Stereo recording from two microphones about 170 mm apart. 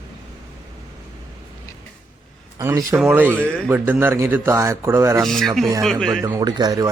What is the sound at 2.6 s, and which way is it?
A man's voice, 15° right (ahead or behind).